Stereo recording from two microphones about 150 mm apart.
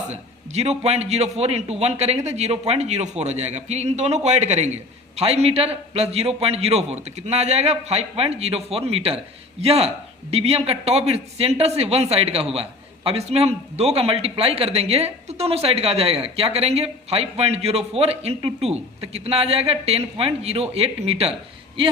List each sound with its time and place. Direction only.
0.1 s a man's voice: 45° right (ahead or behind)